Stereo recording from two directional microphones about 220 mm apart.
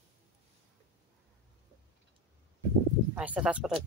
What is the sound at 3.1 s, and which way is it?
Speech, 5° right (ahead or behind).